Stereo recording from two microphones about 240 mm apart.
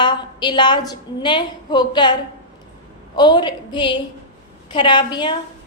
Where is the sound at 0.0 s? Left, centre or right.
Centre.